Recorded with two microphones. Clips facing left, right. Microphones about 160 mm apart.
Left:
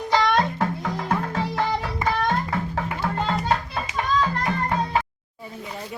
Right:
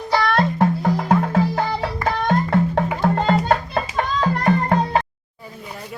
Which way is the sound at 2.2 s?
70° right (ahead or behind).